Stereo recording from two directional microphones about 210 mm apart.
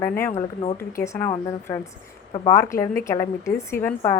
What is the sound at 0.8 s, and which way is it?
A woman's voice, 15° left (ahead or behind).